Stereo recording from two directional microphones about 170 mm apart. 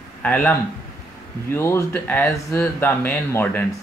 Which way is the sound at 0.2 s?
10° left (ahead or behind).